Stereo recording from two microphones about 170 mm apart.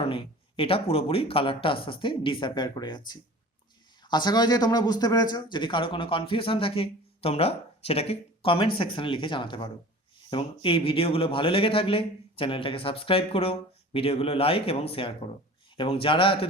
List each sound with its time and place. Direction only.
0.1 s a man's voice: 35° left (ahead or behind)
4.1 s a man's voice: 25° left (ahead or behind)